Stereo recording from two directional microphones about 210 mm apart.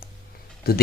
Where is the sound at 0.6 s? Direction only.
45° left (ahead or behind).